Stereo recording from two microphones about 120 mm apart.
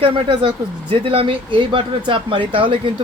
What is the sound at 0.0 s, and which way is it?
Speech, 50° right (ahead or behind).